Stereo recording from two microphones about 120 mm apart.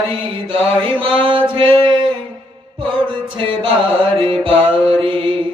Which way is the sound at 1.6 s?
45° right (ahead or behind).